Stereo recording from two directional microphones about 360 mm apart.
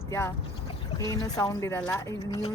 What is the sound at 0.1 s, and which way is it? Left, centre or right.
Speech, centre.